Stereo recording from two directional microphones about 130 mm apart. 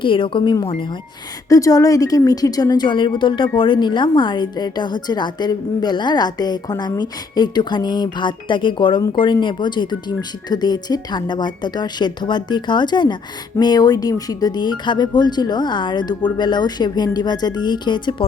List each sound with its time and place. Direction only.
0.0 s a woman's voice: 40° left (ahead or behind)
1.5 s a woman's voice: 25° left (ahead or behind)